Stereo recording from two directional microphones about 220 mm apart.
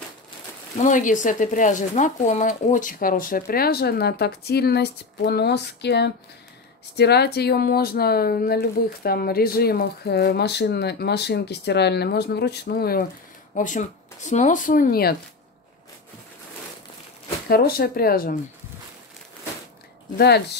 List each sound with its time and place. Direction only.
0.8 s speech: 35° left (ahead or behind)
17.5 s speech: 45° left (ahead or behind)
20.2 s speech: 50° left (ahead or behind)